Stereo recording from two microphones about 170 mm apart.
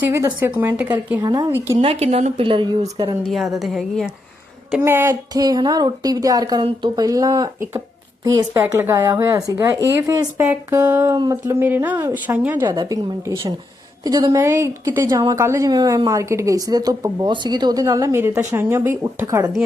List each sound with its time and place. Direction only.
0.0 s speech: 15° right (ahead or behind)
1.2 s a woman's voice: 25° right (ahead or behind)
1.8 s speech: 35° right (ahead or behind)
3.2 s a woman's voice: centre (ahead or behind)
4.8 s a woman's voice: 15° right (ahead or behind)
12.6 s a woman's voice: 25° right (ahead or behind)